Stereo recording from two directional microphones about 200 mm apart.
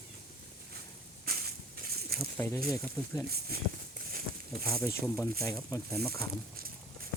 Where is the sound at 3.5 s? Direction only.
50° right (ahead or behind).